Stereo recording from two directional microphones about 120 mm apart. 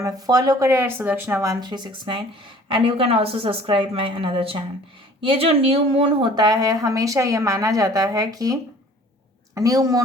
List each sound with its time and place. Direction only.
0.0 s a woman's voice: 30° right (ahead or behind)
9.6 s a woman's voice: 30° right (ahead or behind)